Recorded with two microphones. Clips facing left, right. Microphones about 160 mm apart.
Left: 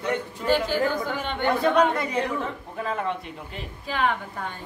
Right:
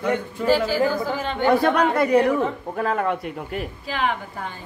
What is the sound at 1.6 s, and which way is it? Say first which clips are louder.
Speech: right 2 dB; 65° right (ahead or behind).